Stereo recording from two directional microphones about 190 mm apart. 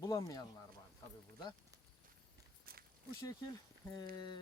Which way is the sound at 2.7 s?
50° right (ahead or behind).